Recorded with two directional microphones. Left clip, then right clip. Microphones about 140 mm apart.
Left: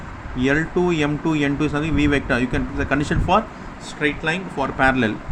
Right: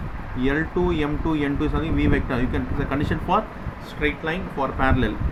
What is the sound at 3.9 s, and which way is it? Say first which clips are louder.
Speech: left 3 dB; 70° left (ahead or behind).